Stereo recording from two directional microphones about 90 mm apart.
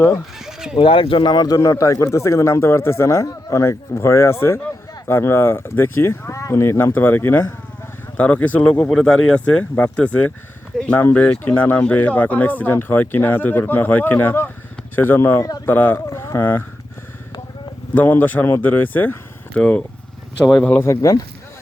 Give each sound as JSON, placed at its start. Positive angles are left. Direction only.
{"t": 0.3, "sound": "bleat", "side_deg": -5}
{"t": 0.8, "sound": "speech", "side_deg": 90}
{"t": 1.5, "sound": "speech", "side_deg": 35}
{"t": 17.9, "sound": "speech", "side_deg": 20}
{"t": 20.8, "sound": "speech", "side_deg": 35}